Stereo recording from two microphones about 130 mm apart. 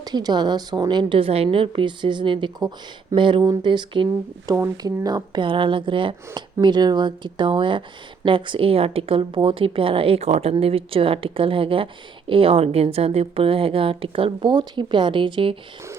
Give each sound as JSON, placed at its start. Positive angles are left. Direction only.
{"t": 0.0, "sound": "speech", "side_deg": -30}
{"t": 3.4, "sound": "speech", "side_deg": -25}
{"t": 3.7, "sound": "speech", "side_deg": -40}
{"t": 4.5, "sound": "speech", "side_deg": -25}
{"t": 10.5, "sound": "a woman's voice", "side_deg": -45}